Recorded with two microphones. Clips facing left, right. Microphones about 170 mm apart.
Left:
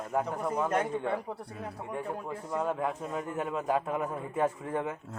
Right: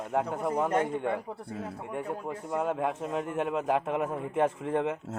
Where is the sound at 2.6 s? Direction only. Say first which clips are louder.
Right 2 dB; 65° right (ahead or behind); by 5.1 s 85° right.